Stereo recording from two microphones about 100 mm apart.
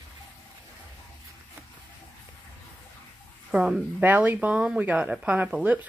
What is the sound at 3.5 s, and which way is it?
Speech, 10° right (ahead or behind).